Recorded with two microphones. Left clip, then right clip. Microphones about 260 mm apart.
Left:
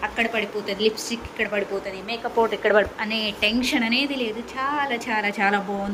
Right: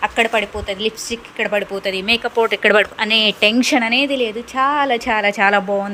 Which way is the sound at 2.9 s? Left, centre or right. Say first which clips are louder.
Right 10 dB; right.